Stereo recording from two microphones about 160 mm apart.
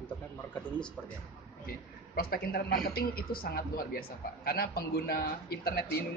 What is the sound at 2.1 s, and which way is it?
A man's voice, 65° left (ahead or behind).